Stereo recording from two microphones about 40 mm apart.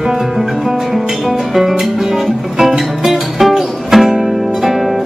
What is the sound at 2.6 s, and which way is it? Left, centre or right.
Music, centre.